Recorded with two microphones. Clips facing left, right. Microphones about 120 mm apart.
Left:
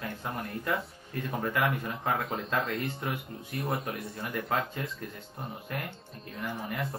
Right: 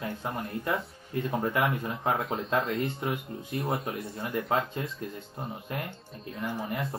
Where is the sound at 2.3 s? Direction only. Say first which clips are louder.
Right 3 dB; centre (ahead or behind).